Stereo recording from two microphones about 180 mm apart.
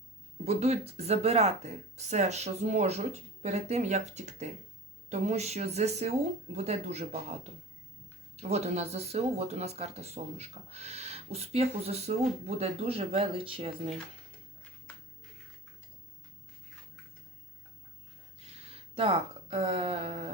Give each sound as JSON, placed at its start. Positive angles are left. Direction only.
{"t": 0.4, "sound": "speech", "side_deg": -35}
{"t": 8.4, "sound": "speech", "side_deg": -35}
{"t": 18.3, "sound": "a sound", "side_deg": -35}